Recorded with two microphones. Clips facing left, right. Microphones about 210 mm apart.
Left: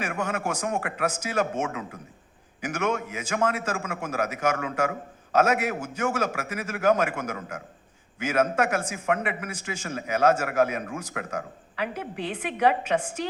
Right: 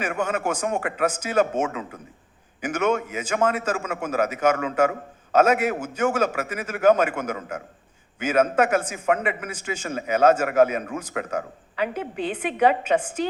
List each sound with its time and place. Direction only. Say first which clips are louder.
0.0 s a man's voice: right 4 dB; 25° right (ahead or behind)